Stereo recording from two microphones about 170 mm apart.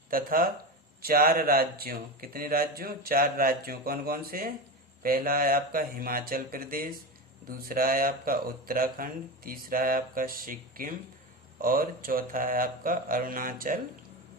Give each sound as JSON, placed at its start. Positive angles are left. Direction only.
{"t": 0.1, "sound": "a man's voice", "side_deg": -55}